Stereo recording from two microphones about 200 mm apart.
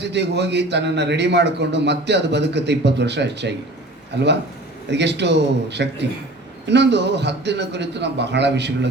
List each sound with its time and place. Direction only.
0.0 s a man's voice: 60° right (ahead or behind)